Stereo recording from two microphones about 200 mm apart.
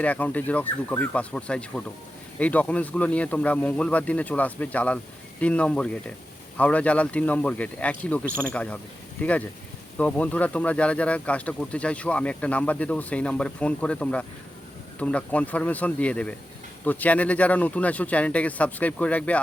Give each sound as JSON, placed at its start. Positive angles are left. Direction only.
{"t": 0.0, "sound": "speech", "side_deg": 5}